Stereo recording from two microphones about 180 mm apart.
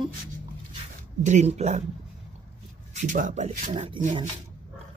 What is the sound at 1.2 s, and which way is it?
Speech, 40° right (ahead or behind).